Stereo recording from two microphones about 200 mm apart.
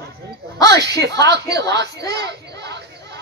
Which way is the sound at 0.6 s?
20° left (ahead or behind).